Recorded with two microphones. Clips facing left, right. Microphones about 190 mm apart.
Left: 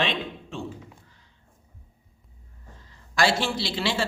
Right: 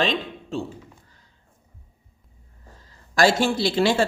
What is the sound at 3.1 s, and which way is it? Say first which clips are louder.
Speech: right 5 dB; 45° right (ahead or behind).